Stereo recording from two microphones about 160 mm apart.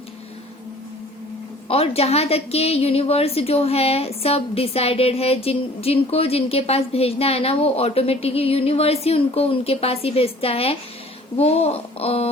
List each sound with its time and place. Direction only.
1.6 s a woman's voice: 40° left (ahead or behind)